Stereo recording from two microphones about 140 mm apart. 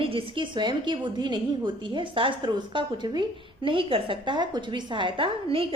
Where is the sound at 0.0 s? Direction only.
40° right (ahead or behind).